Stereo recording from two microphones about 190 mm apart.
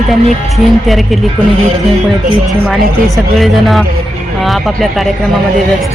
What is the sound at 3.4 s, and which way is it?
Speech, centre (ahead or behind).